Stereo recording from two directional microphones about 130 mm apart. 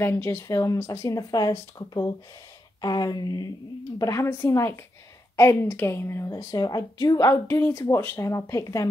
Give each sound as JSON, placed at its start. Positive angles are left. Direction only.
{"t": 0.0, "sound": "a woman's voice", "side_deg": 20}